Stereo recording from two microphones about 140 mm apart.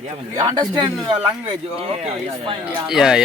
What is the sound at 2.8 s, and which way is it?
Speech, 5° right (ahead or behind).